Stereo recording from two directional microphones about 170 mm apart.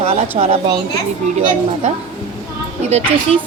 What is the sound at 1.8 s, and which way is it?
Speech, 45° right (ahead or behind).